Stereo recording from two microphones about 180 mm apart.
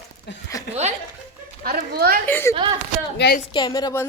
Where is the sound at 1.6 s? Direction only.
60° right (ahead or behind).